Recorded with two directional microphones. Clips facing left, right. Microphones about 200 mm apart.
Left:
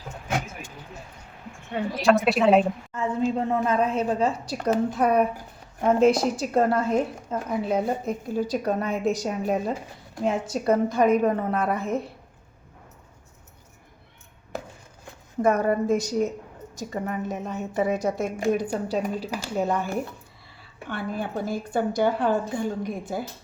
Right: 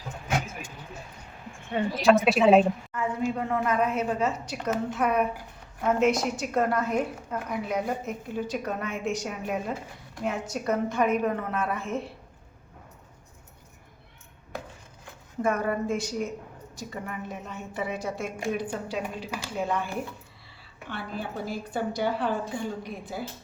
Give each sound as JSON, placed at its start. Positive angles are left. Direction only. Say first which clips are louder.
{"t": 1.7, "sound": "a woman's voice", "louder": "even", "side_deg": 0}
{"t": 2.9, "sound": "a woman's voice", "louder": "left 4 dB", "side_deg": 25}
{"t": 15.4, "sound": "a woman's voice", "louder": "left 5 dB", "side_deg": 40}